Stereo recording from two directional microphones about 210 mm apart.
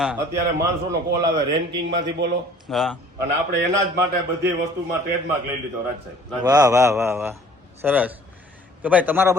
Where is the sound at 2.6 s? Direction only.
Centre (ahead or behind).